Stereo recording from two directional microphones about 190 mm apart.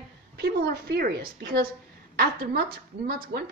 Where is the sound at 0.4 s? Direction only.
55° right (ahead or behind).